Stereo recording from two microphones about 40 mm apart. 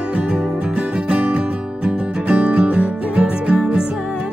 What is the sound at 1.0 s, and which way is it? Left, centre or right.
Music, right.